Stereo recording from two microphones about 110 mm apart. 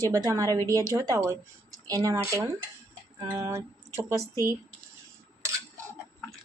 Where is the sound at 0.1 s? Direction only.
30° right (ahead or behind).